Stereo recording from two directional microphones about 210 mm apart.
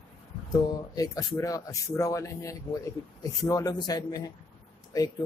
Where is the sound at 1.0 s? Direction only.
15° left (ahead or behind).